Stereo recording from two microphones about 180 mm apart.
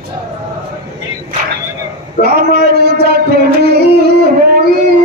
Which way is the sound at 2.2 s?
60° right (ahead or behind).